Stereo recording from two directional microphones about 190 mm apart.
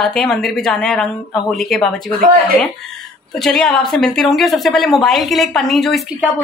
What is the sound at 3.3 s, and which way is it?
A woman's voice, centre (ahead or behind).